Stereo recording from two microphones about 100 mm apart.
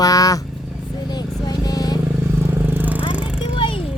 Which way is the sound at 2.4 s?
20° right (ahead or behind).